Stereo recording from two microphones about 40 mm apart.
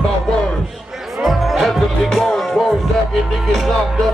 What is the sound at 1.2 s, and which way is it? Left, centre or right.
Music, centre.